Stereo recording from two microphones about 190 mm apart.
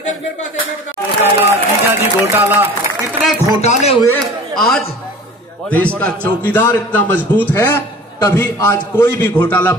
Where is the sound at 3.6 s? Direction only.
35° left (ahead or behind).